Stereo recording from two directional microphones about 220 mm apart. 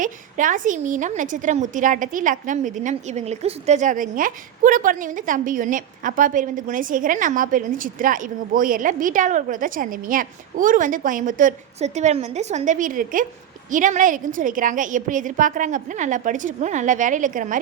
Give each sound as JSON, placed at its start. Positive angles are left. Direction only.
{"t": 0.0, "sound": "a woman's voice", "side_deg": -35}